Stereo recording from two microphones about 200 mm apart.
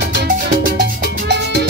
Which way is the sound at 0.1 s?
55° right (ahead or behind).